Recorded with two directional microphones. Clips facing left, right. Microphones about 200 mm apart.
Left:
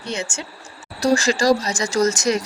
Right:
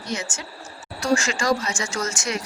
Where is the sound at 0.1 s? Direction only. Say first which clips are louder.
Left 3 dB; 30° left (ahead or behind).